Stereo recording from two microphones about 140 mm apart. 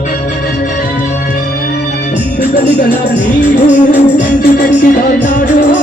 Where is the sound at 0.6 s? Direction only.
75° left (ahead or behind).